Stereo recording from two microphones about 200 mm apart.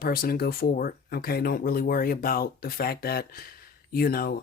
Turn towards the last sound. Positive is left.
turn(degrees=50)  # may be behind; listen again after turning